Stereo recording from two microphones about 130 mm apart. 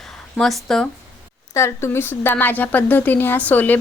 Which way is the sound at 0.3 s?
5° left (ahead or behind).